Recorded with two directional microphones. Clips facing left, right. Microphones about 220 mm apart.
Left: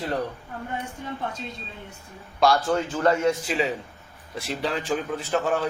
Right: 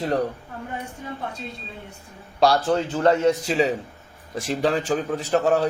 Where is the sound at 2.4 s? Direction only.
35° right (ahead or behind).